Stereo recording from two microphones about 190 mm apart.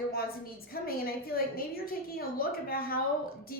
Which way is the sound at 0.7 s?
50° left (ahead or behind).